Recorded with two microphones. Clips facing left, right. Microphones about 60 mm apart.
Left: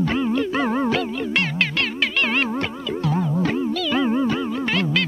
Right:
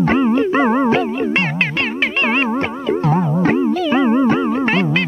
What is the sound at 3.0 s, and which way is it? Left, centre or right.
Music, right.